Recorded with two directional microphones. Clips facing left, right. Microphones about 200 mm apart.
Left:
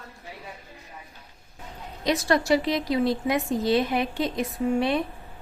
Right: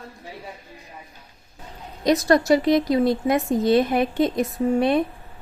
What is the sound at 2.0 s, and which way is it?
A woman's voice, 45° right (ahead or behind).